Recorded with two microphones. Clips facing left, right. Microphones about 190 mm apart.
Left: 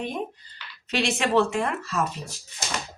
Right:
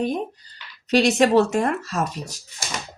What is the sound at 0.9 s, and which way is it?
Speech, 40° right (ahead or behind).